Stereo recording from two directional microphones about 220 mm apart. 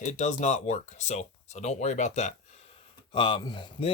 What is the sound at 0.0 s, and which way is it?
Speech, 35° left (ahead or behind).